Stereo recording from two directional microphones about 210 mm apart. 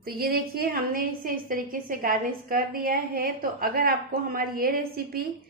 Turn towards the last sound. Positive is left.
turn(degrees=-45)  # may be behind; listen again after turning